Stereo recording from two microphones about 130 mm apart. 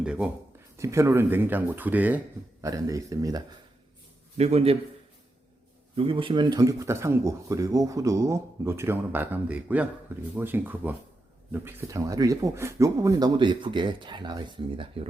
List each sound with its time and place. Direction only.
0.0 s speech: 5° right (ahead or behind)
0.8 s speech: 20° right (ahead or behind)
2.6 s speech: 25° right (ahead or behind)
4.4 s a man's voice: 55° right (ahead or behind)
6.0 s speech: 45° right (ahead or behind)